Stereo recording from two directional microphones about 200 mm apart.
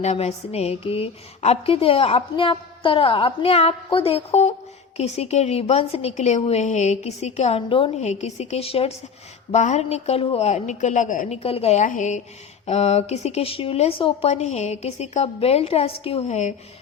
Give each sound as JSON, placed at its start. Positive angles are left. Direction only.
{"t": 0.0, "sound": "a woman's voice", "side_deg": 35}